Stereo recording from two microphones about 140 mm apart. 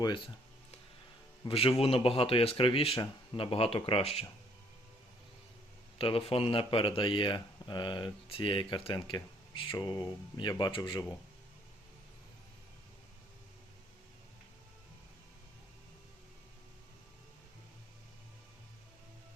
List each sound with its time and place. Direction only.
1.5 s speech: 45° left (ahead or behind)
6.0 s speech: 40° left (ahead or behind)